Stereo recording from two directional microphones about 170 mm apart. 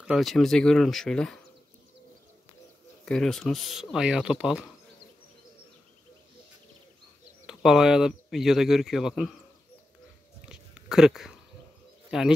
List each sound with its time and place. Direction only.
0.0 s speech: centre (ahead or behind)
3.1 s speech: 5° left (ahead or behind)
7.4 s speech: 5° right (ahead or behind)
10.5 s a sound: 5° right (ahead or behind)
12.1 s speech: 5° right (ahead or behind)